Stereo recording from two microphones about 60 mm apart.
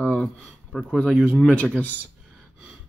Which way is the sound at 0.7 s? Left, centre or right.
Centre.